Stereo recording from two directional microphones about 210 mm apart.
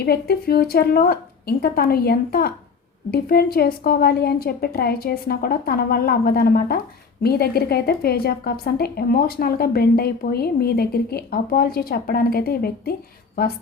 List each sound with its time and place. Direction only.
0.0 s a woman's voice: 50° left (ahead or behind)